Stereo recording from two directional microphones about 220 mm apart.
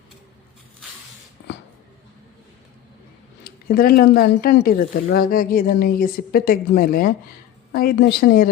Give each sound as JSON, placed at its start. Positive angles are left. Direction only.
{"t": 3.4, "sound": "a woman's voice", "side_deg": 40}